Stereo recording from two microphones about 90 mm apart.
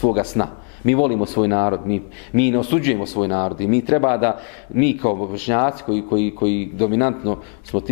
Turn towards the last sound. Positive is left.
turn(degrees=20)  # may be behind; listen again after turning